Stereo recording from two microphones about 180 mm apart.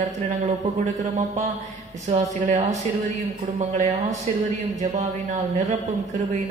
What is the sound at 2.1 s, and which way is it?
Speech, 35° right (ahead or behind).